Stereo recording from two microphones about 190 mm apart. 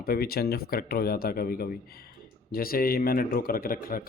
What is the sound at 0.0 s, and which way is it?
Speech, 55° left (ahead or behind).